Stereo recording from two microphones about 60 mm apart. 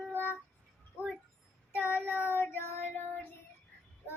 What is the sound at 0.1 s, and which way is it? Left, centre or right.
Music, left.